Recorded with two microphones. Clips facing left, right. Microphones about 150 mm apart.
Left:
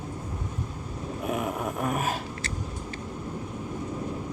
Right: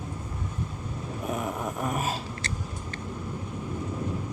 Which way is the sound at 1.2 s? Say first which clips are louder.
Left 2 dB; 5° left (ahead or behind).